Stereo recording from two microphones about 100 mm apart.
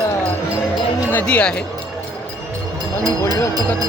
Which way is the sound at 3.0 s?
40° right (ahead or behind).